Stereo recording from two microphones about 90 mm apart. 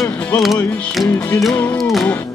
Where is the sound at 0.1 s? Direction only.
15° left (ahead or behind).